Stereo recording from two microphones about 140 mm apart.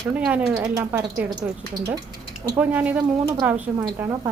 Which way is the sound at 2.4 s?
10° right (ahead or behind).